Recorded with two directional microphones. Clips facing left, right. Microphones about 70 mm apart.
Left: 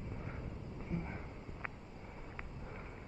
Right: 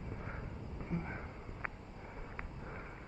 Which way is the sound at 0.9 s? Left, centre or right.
Right.